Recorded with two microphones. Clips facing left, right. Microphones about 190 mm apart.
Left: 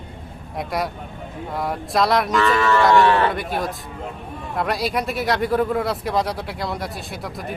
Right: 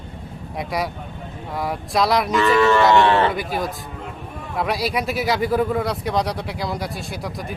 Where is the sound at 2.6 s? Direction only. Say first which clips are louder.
Right 2 dB; 20° right (ahead or behind).